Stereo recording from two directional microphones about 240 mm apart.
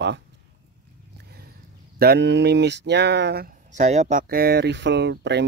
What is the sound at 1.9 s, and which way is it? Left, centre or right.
Speech, right.